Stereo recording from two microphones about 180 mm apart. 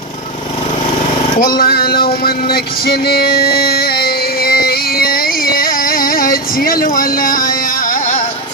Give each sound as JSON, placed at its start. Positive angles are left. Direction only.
{"t": 1.4, "sound": "speech", "side_deg": 55}
{"t": 2.2, "sound": "music", "side_deg": 55}